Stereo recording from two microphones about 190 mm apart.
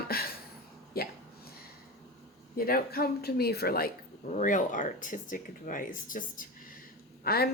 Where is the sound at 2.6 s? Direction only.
50° left (ahead or behind).